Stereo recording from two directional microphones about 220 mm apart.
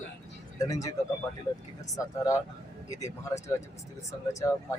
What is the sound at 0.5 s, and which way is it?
Speech, 15° left (ahead or behind).